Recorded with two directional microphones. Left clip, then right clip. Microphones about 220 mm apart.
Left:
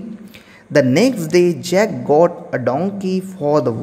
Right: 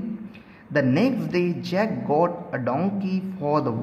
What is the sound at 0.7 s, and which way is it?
A man's voice, 35° left (ahead or behind).